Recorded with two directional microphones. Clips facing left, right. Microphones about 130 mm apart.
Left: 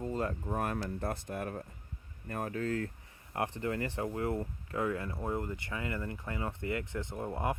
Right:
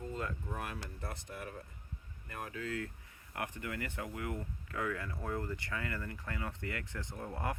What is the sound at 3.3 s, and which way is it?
Speech, 30° left (ahead or behind).